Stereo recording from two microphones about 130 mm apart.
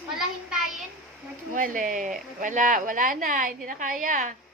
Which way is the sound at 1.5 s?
90° right.